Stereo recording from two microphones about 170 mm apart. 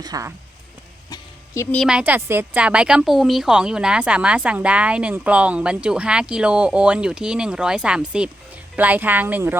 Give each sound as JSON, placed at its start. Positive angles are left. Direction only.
{"t": 0.0, "sound": "speech", "side_deg": -20}
{"t": 1.7, "sound": "speech", "side_deg": 0}